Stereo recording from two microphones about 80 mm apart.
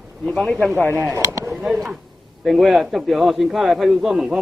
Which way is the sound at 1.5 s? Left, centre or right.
Centre.